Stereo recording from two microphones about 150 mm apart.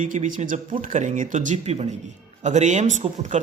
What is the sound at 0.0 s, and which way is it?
A man's voice, 55° right (ahead or behind).